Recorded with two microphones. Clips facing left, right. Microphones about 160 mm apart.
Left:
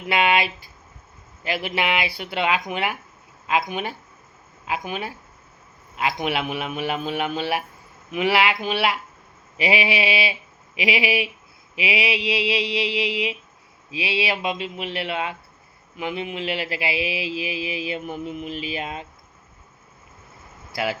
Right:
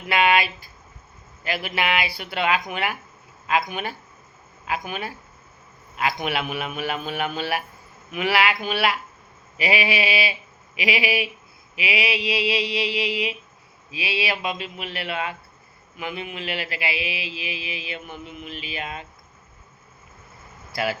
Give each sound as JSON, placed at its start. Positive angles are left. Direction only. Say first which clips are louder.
{"t": 0.1, "sound": "a man's voice", "louder": "even", "side_deg": 20}
{"t": 16.0, "sound": "a sound", "louder": "left 4 dB", "side_deg": 25}
{"t": 20.7, "sound": "a man's voice", "louder": "even", "side_deg": 20}